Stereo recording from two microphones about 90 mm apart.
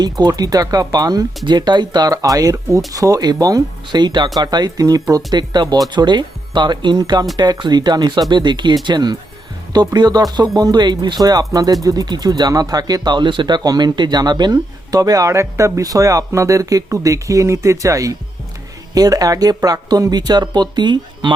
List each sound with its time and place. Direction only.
0.0 s speech: 50° right (ahead or behind)
13.6 s speech: 45° right (ahead or behind)